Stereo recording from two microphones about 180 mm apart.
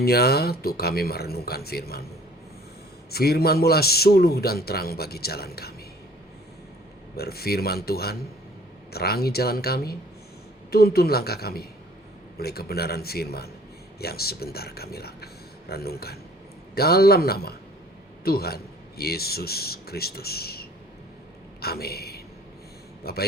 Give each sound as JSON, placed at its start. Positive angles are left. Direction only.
{"t": 0.0, "sound": "a man's voice", "side_deg": 60}
{"t": 3.1, "sound": "a man's voice", "side_deg": 60}
{"t": 7.2, "sound": "a man's voice", "side_deg": 60}